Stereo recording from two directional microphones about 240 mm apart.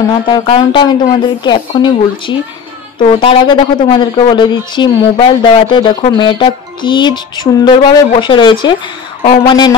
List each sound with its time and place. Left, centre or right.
0.1 s a woman's voice: centre